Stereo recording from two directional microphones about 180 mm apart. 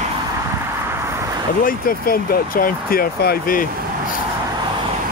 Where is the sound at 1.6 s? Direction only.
55° left (ahead or behind).